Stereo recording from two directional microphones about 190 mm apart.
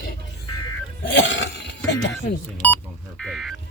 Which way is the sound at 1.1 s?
75° left (ahead or behind).